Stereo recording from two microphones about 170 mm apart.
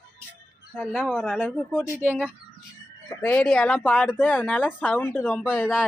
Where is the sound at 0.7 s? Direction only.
5° left (ahead or behind).